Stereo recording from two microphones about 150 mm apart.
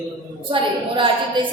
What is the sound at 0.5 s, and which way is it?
Speech, 35° right (ahead or behind).